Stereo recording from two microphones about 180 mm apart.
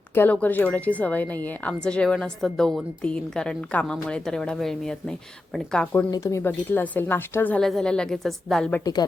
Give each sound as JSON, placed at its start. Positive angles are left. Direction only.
{"t": 0.1, "sound": "speech", "side_deg": 10}
{"t": 8.8, "sound": "a woman's voice", "side_deg": 20}